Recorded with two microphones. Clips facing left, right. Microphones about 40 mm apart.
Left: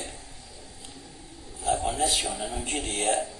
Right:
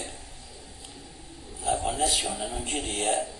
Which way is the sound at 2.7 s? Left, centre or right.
Left.